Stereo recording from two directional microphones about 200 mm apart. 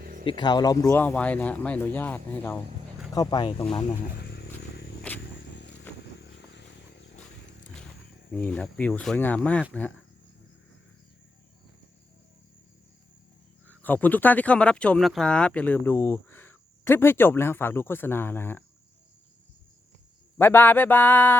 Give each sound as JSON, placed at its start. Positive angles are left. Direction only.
{"t": 0.0, "sound": "a sound", "side_deg": -45}
{"t": 0.3, "sound": "speech", "side_deg": 20}
{"t": 4.2, "sound": "a sound", "side_deg": 55}
{"t": 8.3, "sound": "speech", "side_deg": 5}
{"t": 13.7, "sound": "speech", "side_deg": 10}
{"t": 20.4, "sound": "speech", "side_deg": 10}